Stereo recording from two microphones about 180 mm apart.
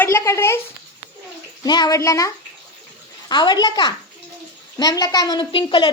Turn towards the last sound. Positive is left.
turn(degrees=25)  # may be behind; listen again after turning